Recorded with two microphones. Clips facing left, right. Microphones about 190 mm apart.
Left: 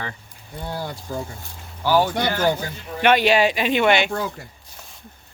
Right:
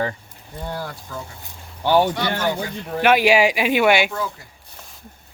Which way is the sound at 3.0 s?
5° right (ahead or behind).